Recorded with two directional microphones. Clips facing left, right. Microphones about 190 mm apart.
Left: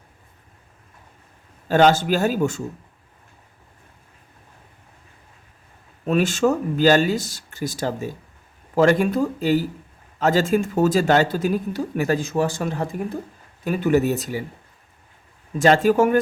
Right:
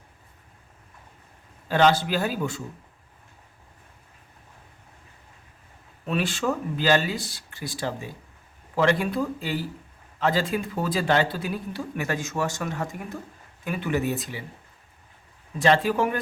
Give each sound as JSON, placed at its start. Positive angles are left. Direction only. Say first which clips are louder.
{"t": 1.6, "sound": "speech", "louder": "left 4 dB", "side_deg": 45}
{"t": 6.1, "sound": "speech", "louder": "left 7 dB", "side_deg": 45}
{"t": 15.5, "sound": "speech", "louder": "left 5 dB", "side_deg": 45}